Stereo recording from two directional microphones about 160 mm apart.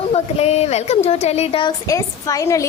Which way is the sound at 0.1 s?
40° left (ahead or behind).